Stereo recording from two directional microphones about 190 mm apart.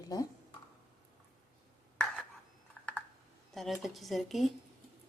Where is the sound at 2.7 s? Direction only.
5° left (ahead or behind).